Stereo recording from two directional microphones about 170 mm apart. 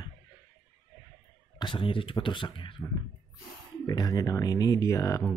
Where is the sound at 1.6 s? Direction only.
30° left (ahead or behind).